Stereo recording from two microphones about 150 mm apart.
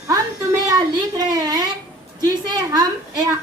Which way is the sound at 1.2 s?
25° right (ahead or behind).